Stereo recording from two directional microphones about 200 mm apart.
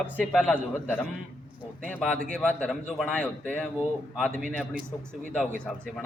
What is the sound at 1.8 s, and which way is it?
Speech, 5° left (ahead or behind).